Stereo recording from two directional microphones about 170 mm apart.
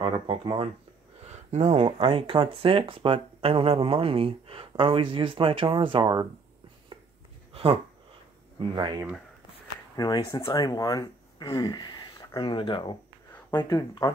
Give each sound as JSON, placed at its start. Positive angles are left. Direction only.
{"t": 0.0, "sound": "speech", "side_deg": -30}
{"t": 1.2, "sound": "speech", "side_deg": -40}
{"t": 7.5, "sound": "speech", "side_deg": -35}
{"t": 9.9, "sound": "speech", "side_deg": 20}
{"t": 13.5, "sound": "speech", "side_deg": 15}